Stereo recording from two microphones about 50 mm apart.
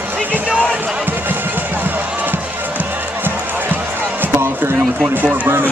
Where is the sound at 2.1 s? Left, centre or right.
Right.